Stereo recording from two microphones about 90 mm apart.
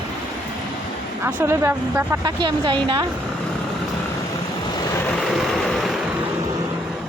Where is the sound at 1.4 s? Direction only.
30° right (ahead or behind).